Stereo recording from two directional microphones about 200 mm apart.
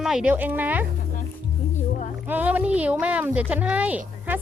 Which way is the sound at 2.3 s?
10° right (ahead or behind).